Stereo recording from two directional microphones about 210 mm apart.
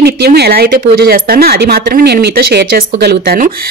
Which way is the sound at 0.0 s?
50° right (ahead or behind).